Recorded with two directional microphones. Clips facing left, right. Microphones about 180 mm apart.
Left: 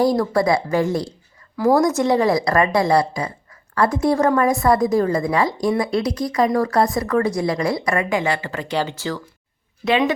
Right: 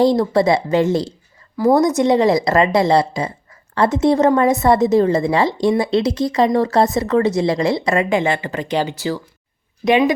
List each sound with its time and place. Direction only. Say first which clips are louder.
0.0 s speech: right 3 dB; 25° right (ahead or behind)